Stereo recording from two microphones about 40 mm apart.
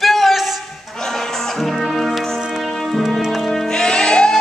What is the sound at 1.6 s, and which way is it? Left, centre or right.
Music, centre.